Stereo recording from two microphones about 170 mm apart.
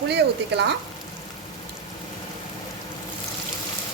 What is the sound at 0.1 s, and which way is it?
Speech, 80° right.